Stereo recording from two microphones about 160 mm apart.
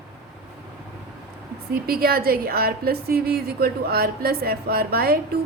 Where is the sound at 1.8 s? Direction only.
70° right (ahead or behind).